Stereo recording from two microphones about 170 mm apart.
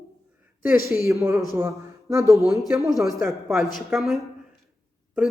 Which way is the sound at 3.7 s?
Centre (ahead or behind).